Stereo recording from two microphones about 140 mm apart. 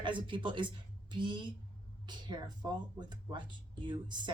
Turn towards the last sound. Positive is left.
turn(degrees=-35)  # may be behind; listen again after turning